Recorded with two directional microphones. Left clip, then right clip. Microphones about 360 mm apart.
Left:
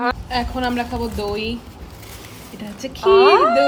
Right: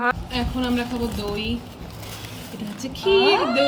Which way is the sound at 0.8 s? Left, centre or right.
Centre.